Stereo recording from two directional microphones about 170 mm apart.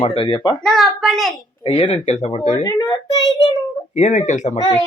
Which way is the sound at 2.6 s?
20° left (ahead or behind).